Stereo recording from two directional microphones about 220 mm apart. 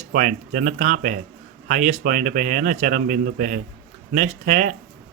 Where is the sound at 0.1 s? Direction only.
40° right (ahead or behind).